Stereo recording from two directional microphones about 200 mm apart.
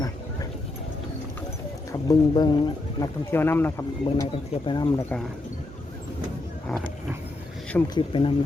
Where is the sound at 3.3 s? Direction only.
10° left (ahead or behind).